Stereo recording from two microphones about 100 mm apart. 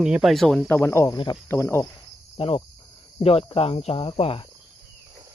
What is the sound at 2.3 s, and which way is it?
Insect, 70° left (ahead or behind).